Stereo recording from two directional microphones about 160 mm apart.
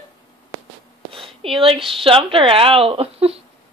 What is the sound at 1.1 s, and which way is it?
Speech, 35° right (ahead or behind).